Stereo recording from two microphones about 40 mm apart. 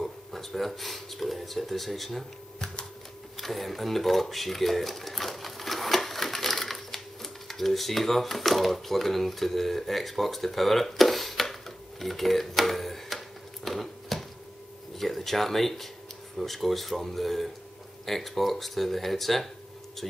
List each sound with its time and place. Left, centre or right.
0.0 s speech: centre
3.3 s speech: centre
13.7 s a sound: centre
15.0 s speech: centre